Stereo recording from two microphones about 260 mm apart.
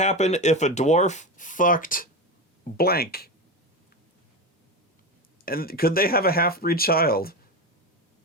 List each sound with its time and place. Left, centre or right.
0.0 s speech: left
5.5 s speech: left